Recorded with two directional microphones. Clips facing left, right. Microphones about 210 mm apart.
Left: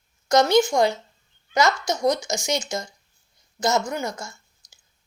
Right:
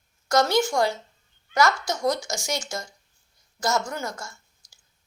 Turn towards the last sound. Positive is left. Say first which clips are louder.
# left 2 dB
turn(degrees=20)  # may be behind; listen again after turning